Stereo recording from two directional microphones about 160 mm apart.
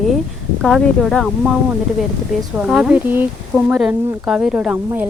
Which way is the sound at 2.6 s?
5° right (ahead or behind).